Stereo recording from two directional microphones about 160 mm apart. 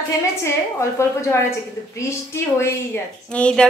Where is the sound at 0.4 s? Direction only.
15° left (ahead or behind).